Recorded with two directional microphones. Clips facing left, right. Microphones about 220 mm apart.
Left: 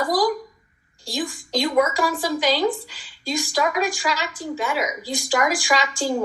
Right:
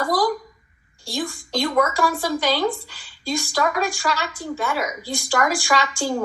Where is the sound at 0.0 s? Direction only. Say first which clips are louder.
Even; 15° left (ahead or behind).